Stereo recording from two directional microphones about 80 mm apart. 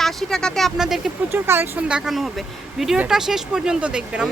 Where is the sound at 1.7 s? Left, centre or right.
Centre.